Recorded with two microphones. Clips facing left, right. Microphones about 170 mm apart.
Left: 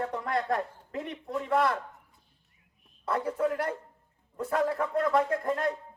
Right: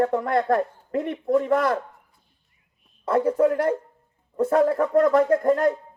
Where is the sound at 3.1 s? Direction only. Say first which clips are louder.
Right 9 dB; 45° right (ahead or behind).